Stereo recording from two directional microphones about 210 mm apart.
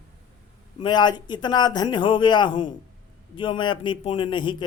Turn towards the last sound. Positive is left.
turn(degrees=20)  # may be behind; listen again after turning